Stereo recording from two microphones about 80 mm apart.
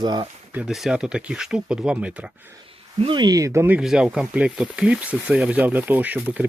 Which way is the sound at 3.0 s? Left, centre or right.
Right.